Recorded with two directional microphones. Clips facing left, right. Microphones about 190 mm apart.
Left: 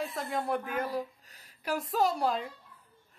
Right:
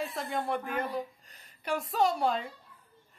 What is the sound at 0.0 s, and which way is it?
A woman's voice, centre (ahead or behind).